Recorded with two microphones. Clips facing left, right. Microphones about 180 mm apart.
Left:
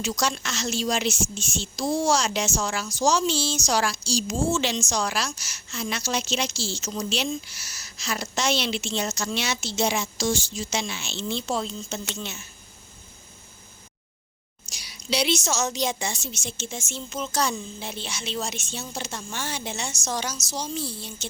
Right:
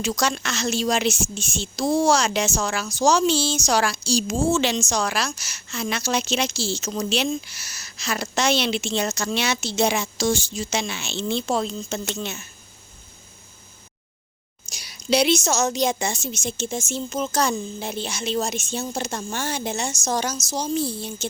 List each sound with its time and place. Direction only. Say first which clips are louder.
0.0 s a woman's voice: right 3 dB; 60° right (ahead or behind)
14.7 s a woman's voice: right 7 dB; 50° right (ahead or behind)